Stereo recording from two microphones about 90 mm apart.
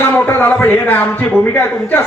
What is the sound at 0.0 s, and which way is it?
A man's voice, 20° left (ahead or behind).